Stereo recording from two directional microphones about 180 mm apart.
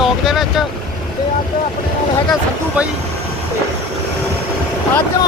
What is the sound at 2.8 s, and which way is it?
Speech, 5° right (ahead or behind).